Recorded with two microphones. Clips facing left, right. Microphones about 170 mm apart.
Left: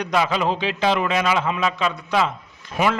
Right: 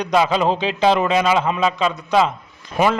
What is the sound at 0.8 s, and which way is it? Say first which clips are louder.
Speech: right 4 dB; 35° right (ahead or behind).